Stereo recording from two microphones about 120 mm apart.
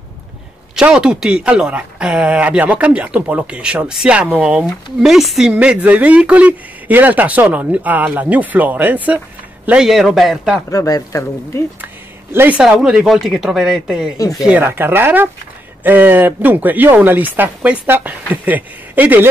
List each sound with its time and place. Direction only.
0.7 s speech: 5° right (ahead or behind)
10.7 s speech: 25° left (ahead or behind)
11.8 s a sound: 15° right (ahead or behind)
12.5 s speech: 5° right (ahead or behind)
14.6 s speech: 20° right (ahead or behind)